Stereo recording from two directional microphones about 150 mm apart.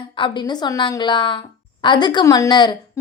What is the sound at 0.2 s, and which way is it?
A woman's voice, 30° left (ahead or behind).